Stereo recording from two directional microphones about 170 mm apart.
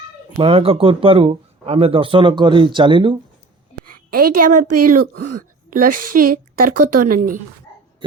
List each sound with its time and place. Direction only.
0.3 s speech: 35° right (ahead or behind)
3.8 s a woman's voice: 60° right (ahead or behind)